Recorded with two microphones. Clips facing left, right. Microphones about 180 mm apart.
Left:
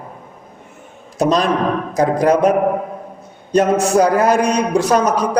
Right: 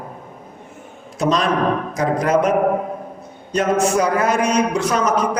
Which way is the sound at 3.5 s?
35° left (ahead or behind).